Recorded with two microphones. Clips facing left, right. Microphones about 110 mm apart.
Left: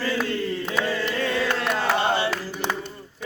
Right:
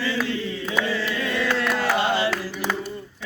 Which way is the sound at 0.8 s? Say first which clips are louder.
Left 1 dB; 50° left (ahead or behind).